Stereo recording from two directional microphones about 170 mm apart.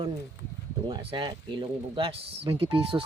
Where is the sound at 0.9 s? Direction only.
30° right (ahead or behind).